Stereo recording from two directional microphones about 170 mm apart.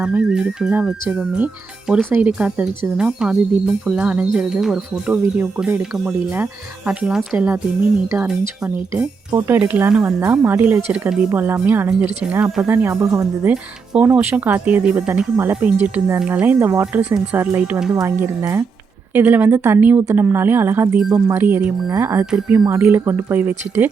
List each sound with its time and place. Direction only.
0.0 s speech: 5° right (ahead or behind)
8.9 s speech: 15° right (ahead or behind)
13.5 s speech: 5° right (ahead or behind)
17.9 s speech: 15° right (ahead or behind)
22.3 s speech: 5° right (ahead or behind)
22.5 s speech: 15° right (ahead or behind)